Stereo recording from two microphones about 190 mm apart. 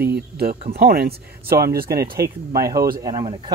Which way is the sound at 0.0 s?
55° right (ahead or behind).